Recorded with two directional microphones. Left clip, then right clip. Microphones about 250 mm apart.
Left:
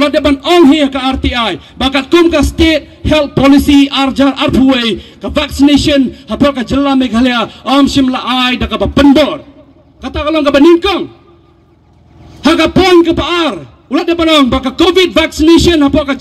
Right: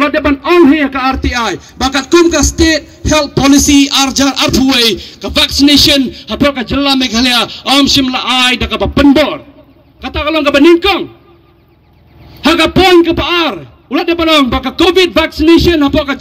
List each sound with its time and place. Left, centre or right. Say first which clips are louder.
0.0 s a sound: left 1 dB; left
1.8 s speech: even; left
2.4 s a man's voice: even; left
3.1 s a man's voice: left 1 dB; left
12.4 s a man's voice: even; left